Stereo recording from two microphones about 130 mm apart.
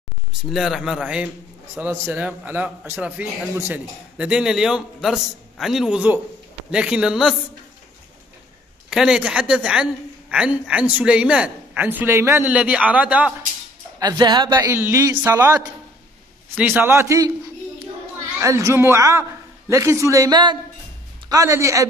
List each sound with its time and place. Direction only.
0.5 s a man's voice: centre (ahead or behind)
8.9 s a man's voice: 5° right (ahead or behind)
12.4 s a man's voice: 10° right (ahead or behind)
13.9 s a man's voice: 30° right (ahead or behind)
18.4 s speech: 25° right (ahead or behind)